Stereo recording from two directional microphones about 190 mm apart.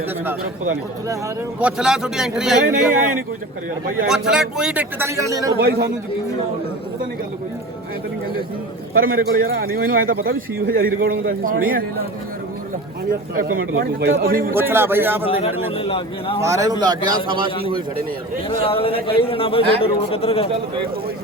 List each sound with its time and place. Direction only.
1.5 s a man's voice: 5° right (ahead or behind)
4.1 s a man's voice: 5° right (ahead or behind)
5.5 s a man's voice: 55° right (ahead or behind)
8.9 s a man's voice: 50° right (ahead or behind)
13.1 s a man's voice: 50° right (ahead or behind)
14.5 s a man's voice: 10° right (ahead or behind)
15.3 s a man's voice: 35° left (ahead or behind)
16.4 s a man's voice: 15° right (ahead or behind)
18.4 s a man's voice: 30° left (ahead or behind)